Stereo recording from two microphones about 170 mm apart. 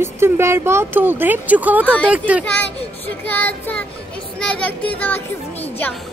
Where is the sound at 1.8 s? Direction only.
10° left (ahead or behind).